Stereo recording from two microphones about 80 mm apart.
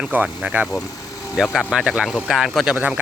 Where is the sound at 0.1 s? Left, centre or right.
Centre.